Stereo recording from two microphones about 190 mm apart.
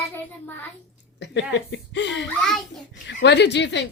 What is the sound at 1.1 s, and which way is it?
A woman's voice, 65° left (ahead or behind).